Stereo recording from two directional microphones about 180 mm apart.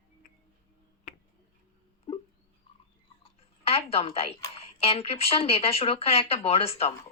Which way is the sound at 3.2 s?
35° left (ahead or behind).